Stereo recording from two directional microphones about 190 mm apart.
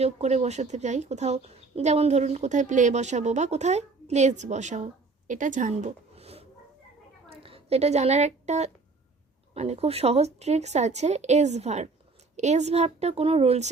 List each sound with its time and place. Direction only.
0.0 s speech: 35° right (ahead or behind)
7.4 s a woman's voice: 30° right (ahead or behind)